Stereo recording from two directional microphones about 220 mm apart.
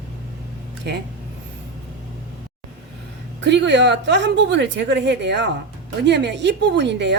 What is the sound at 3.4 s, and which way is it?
A woman's voice, 50° right (ahead or behind).